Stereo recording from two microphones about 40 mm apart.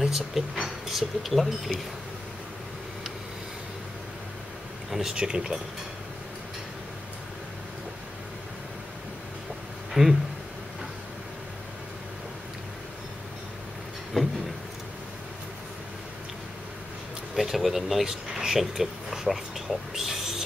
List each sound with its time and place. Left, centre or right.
0.0 s speech: centre
5.1 s speech: right
10.0 s speech: centre
14.2 s vehicle: centre
17.4 s speech: centre
19.9 s a sound: centre